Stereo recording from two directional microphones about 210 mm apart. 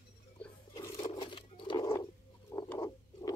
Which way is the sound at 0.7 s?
15° left (ahead or behind).